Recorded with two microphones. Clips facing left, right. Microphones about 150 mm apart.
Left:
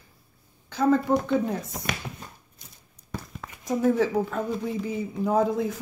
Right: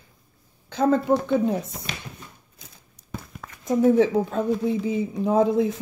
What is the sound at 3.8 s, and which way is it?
Speech, 20° right (ahead or behind).